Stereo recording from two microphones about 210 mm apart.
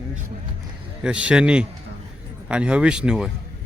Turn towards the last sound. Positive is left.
turn(degrees=-5)  # may be behind; listen again after turning